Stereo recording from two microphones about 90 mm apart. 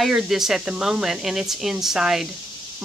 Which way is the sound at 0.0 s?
5° right (ahead or behind).